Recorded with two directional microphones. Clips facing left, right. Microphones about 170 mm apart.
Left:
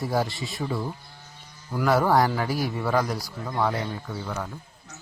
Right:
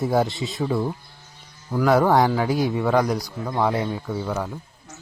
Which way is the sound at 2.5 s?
20° right (ahead or behind).